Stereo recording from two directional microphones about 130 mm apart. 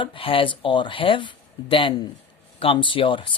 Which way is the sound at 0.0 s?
45° left (ahead or behind).